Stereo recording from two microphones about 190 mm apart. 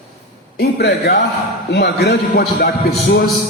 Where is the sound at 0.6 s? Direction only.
60° left (ahead or behind).